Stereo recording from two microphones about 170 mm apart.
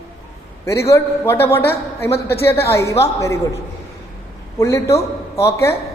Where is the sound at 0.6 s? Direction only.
15° left (ahead or behind).